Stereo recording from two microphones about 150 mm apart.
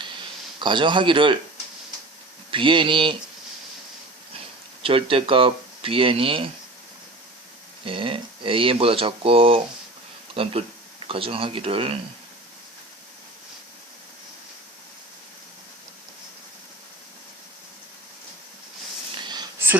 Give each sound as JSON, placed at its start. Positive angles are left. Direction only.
{"t": 0.6, "sound": "speech", "side_deg": -30}
{"t": 2.5, "sound": "speech", "side_deg": -35}
{"t": 4.8, "sound": "speech", "side_deg": -35}
{"t": 7.9, "sound": "speech", "side_deg": -35}
{"t": 19.1, "sound": "a sound", "side_deg": -30}